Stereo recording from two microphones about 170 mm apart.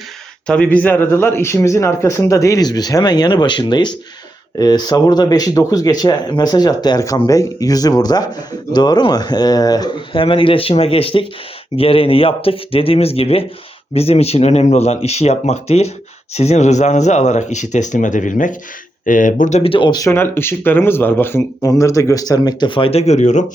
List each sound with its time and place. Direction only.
0.4 s speech: 5° left (ahead or behind); by 23.5 s 45° left (ahead or behind)